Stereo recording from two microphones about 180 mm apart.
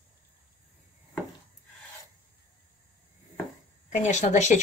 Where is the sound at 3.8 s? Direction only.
40° left (ahead or behind).